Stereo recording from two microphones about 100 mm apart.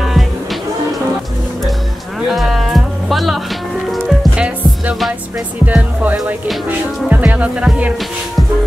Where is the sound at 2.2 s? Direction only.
Centre (ahead or behind).